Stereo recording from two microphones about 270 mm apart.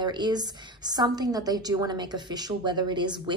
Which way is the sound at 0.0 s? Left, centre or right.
Centre.